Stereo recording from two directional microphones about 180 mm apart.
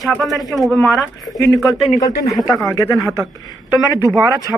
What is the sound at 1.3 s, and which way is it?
Speech, 20° left (ahead or behind).